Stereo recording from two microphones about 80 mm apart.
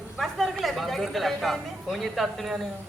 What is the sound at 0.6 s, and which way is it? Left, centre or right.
Speech, centre.